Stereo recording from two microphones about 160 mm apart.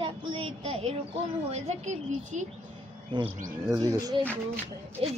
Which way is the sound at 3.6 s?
25° right (ahead or behind).